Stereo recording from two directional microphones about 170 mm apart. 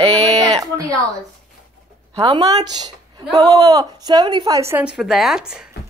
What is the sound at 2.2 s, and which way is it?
A woman's voice, 20° right (ahead or behind).